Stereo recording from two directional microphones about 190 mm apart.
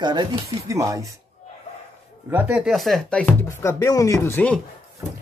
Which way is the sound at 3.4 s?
15° left (ahead or behind).